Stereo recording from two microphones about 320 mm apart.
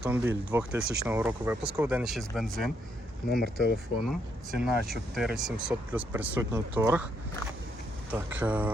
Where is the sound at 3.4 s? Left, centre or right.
Left.